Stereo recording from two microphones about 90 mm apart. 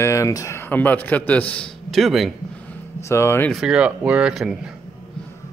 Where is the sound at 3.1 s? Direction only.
30° left (ahead or behind).